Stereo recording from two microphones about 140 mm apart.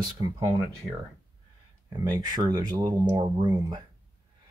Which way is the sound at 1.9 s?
25° right (ahead or behind).